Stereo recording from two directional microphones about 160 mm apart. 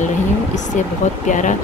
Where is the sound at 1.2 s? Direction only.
50° left (ahead or behind).